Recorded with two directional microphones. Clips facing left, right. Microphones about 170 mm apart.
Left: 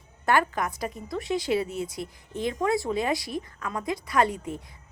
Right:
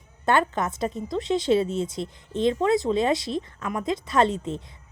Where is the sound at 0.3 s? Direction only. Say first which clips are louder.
Right 2 dB; 25° right (ahead or behind).